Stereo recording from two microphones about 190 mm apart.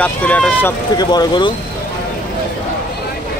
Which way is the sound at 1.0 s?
20° left (ahead or behind).